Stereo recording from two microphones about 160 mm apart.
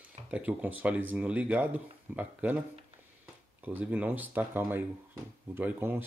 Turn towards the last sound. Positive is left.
turn(degrees=-15)  # may be behind; listen again after turning